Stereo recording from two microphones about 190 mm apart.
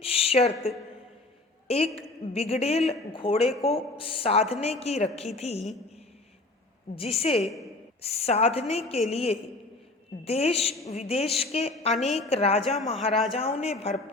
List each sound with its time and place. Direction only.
0.0 s a sound: 30° left (ahead or behind)
1.6 s a woman's voice: 30° left (ahead or behind)
3.5 s speech: centre (ahead or behind)
3.9 s a woman's voice: 30° left (ahead or behind)
6.9 s a woman's voice: 30° left (ahead or behind)